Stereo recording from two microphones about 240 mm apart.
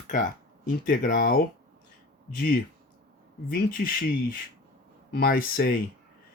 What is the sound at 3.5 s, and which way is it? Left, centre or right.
Speech, left.